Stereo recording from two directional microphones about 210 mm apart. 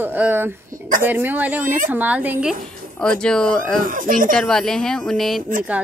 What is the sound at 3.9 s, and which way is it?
Speech, 40° right (ahead or behind).